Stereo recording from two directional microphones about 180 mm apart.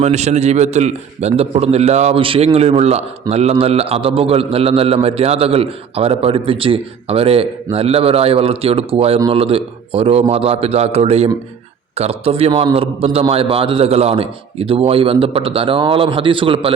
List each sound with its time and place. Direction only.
0.0 s a man's voice: 40° right (ahead or behind)